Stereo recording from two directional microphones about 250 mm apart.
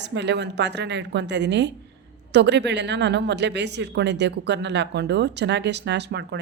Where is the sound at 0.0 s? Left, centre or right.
Right.